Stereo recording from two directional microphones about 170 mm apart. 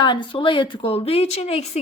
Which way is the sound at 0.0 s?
30° left (ahead or behind).